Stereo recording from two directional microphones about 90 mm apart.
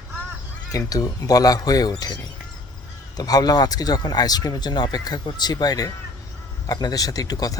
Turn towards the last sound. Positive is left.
turn(degrees=45)  # may be behind; listen again after turning